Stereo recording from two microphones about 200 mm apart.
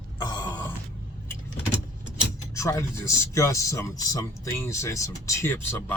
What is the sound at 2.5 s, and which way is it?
Speech, 15° left (ahead or behind).